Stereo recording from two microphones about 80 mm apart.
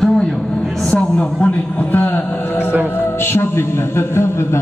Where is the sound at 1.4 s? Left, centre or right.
Left.